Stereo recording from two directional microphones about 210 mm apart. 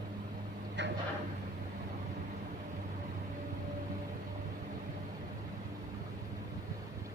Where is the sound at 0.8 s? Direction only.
55° right (ahead or behind).